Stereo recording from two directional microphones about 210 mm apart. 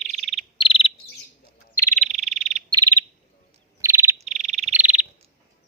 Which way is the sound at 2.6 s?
20° right (ahead or behind).